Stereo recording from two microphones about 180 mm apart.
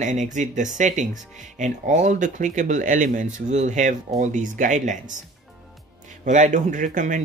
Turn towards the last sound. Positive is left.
turn(degrees=-45)  # may be behind; listen again after turning